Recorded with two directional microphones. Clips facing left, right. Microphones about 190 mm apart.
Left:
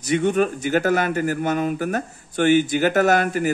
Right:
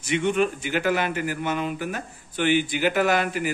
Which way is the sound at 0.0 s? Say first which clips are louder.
Left 3 dB; 40° left (ahead or behind).